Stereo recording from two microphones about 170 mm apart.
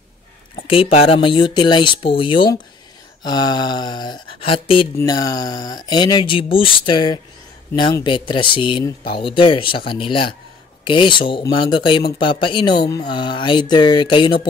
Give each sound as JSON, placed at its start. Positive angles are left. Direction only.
{"t": 0.7, "sound": "speech", "side_deg": 35}
{"t": 4.9, "sound": "speech", "side_deg": 20}